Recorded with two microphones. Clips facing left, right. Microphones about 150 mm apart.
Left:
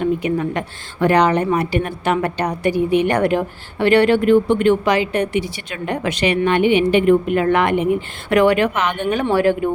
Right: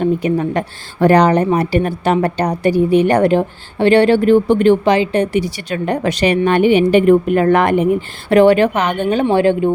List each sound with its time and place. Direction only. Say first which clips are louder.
0.0 s a woman's voice: right 3 dB; 35° right (ahead or behind)